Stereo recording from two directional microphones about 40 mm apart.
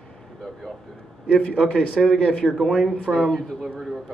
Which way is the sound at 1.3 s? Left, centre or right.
Left.